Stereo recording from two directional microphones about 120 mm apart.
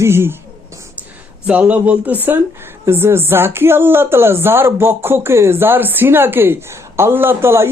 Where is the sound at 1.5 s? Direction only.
10° right (ahead or behind).